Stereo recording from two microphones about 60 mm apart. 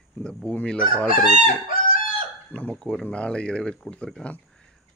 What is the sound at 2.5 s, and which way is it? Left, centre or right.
Speech, left.